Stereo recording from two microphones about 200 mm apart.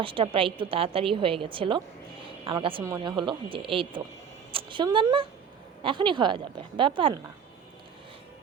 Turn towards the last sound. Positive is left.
turn(degrees=-25)  # may be behind; listen again after turning